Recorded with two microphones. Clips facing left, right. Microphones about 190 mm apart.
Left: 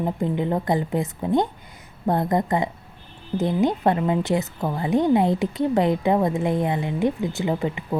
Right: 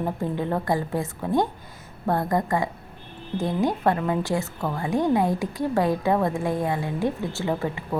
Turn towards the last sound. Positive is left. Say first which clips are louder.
# left 2 dB
turn(degrees=15)  # may be behind; listen again after turning